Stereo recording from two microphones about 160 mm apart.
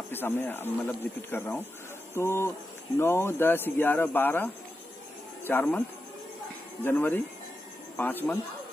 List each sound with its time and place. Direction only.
0.1 s speech: 15° left (ahead or behind)